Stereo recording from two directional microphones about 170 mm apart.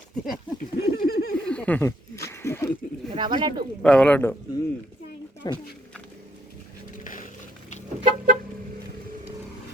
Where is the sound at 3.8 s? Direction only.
5° left (ahead or behind).